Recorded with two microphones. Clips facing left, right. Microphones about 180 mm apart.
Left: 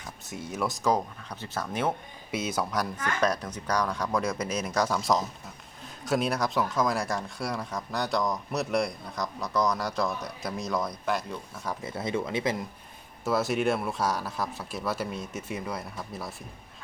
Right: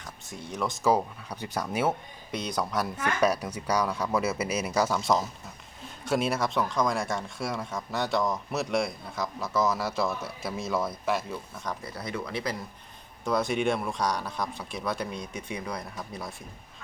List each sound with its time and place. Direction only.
0.5 s speech: centre (ahead or behind)
2.3 s speech: 5° left (ahead or behind)
11.8 s speech: 25° left (ahead or behind)
13.2 s speech: 5° left (ahead or behind)